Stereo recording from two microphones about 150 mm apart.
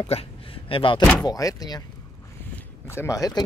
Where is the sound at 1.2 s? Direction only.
25° left (ahead or behind).